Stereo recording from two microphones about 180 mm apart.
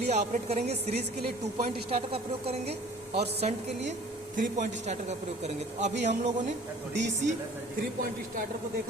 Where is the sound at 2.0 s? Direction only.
35° right (ahead or behind).